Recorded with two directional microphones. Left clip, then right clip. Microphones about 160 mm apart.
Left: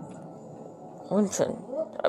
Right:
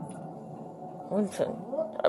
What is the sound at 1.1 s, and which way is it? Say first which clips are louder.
Speech: left 3 dB; 20° left (ahead or behind).